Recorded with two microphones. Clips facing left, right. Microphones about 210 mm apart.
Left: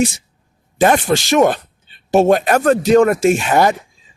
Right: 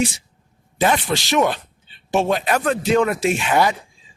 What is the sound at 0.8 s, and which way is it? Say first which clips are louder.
Speech: left 6 dB; 45° left (ahead or behind).